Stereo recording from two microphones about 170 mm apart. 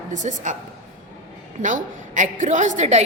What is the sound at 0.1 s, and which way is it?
Speech, 45° right (ahead or behind).